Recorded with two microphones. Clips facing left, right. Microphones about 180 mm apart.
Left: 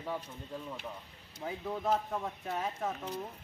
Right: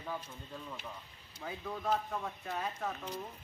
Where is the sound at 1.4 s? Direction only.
20° left (ahead or behind).